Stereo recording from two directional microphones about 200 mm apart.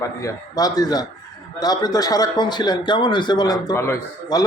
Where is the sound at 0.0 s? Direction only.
15° left (ahead or behind).